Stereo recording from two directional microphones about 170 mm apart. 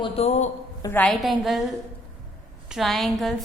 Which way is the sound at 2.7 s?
Centre (ahead or behind).